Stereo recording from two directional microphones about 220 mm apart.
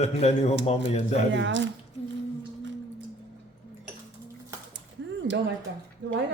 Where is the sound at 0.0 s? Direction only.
30° left (ahead or behind).